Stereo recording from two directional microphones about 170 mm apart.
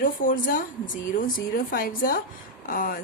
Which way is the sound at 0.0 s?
50° left (ahead or behind).